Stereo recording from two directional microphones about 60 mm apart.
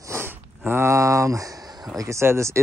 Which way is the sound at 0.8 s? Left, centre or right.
Right.